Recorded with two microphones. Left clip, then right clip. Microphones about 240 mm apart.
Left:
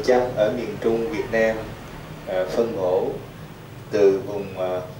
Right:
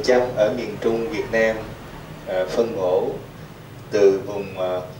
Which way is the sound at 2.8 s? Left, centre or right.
Right.